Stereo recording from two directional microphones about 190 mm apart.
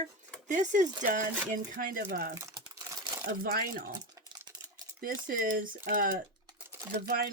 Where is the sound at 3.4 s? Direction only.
50° right (ahead or behind).